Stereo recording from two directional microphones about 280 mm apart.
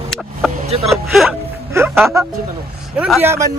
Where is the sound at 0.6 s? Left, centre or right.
Right.